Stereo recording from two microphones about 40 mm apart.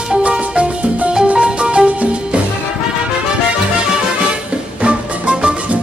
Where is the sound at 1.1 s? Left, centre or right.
Right.